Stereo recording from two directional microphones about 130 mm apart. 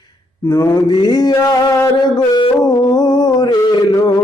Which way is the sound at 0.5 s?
30° left (ahead or behind).